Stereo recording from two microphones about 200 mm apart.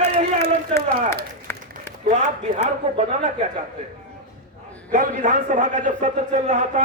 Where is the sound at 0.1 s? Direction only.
30° right (ahead or behind).